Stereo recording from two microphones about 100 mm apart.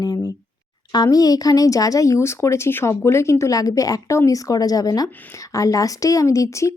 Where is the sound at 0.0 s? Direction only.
40° left (ahead or behind).